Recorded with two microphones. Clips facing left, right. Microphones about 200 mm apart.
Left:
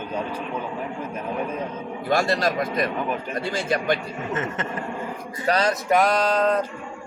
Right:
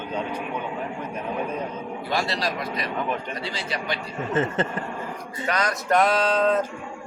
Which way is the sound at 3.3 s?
50° left (ahead or behind).